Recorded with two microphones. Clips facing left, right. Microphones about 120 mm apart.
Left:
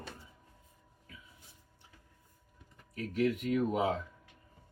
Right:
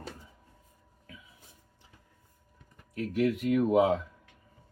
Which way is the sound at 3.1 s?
90° right.